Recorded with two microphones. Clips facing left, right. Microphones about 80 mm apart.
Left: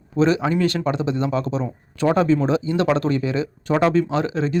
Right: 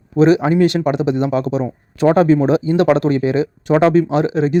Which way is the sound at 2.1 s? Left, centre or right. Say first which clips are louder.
Right 5 dB; right.